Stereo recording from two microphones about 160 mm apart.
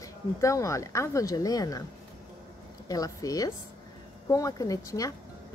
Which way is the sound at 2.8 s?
25° left (ahead or behind).